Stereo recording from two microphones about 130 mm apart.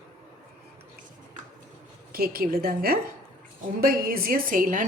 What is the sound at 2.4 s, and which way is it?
Speech, 90° right.